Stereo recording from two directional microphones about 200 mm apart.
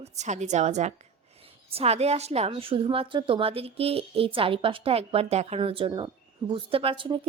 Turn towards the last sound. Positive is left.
turn(degrees=-25)  # may be behind; listen again after turning